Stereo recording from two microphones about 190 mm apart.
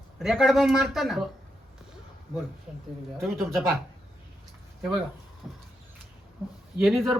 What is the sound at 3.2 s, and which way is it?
Speech, centre (ahead or behind).